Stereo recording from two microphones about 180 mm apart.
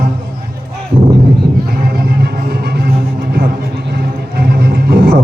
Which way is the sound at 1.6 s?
60° right (ahead or behind).